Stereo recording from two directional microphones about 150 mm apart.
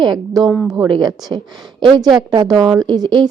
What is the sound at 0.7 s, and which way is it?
A woman's voice, 25° right (ahead or behind).